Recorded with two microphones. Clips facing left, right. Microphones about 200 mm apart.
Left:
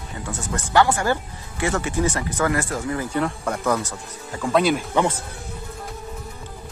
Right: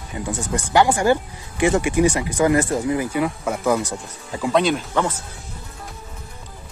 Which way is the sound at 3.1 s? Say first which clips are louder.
Right 2 dB; 5° right (ahead or behind).